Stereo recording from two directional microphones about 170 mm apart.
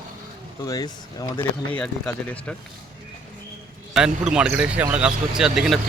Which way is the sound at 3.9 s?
5° right (ahead or behind).